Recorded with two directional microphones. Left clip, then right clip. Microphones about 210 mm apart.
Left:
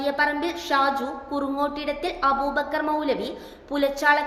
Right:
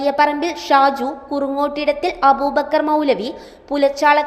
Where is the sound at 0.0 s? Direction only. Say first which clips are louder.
Right 7 dB; 30° right (ahead or behind).